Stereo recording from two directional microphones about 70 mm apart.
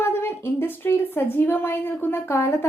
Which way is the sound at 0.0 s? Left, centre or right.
Left.